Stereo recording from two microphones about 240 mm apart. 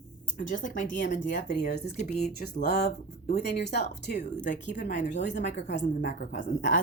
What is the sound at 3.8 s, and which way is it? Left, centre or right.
A woman's voice, left.